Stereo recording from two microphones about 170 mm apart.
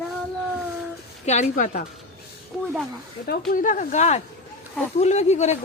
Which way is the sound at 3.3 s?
50° left (ahead or behind).